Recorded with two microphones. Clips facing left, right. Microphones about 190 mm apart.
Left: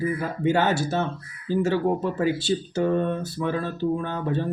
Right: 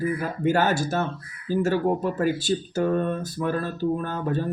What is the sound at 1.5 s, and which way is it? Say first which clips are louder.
Speech: even; 10° right (ahead or behind).